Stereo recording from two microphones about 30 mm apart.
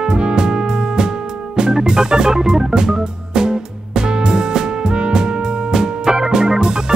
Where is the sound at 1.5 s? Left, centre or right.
Right.